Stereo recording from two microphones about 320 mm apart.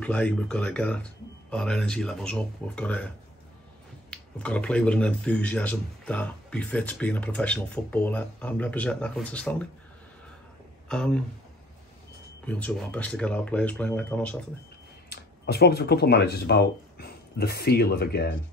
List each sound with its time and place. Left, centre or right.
0.0 s speech: centre
4.1 s speech: centre
10.9 s speech: centre
12.4 s speech: centre
15.0 s speech: left